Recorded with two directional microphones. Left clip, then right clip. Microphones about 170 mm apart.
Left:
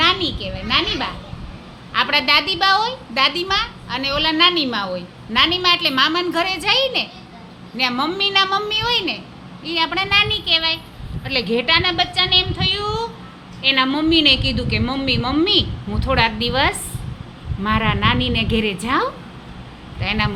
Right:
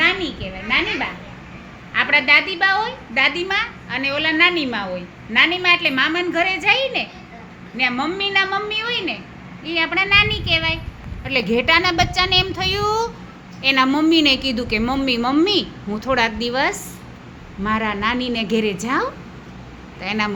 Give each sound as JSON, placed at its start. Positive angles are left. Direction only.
{"t": 0.0, "sound": "a sound", "side_deg": 20}
{"t": 1.9, "sound": "a woman's voice", "side_deg": 15}
{"t": 9.6, "sound": "a woman's voice", "side_deg": 0}